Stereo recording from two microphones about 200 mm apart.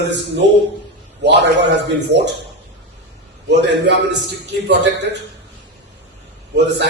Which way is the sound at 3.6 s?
60° right (ahead or behind).